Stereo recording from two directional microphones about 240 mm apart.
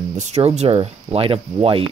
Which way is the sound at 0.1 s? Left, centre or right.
Right.